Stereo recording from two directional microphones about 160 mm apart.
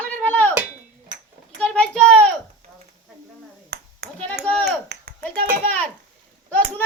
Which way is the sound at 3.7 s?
90° right.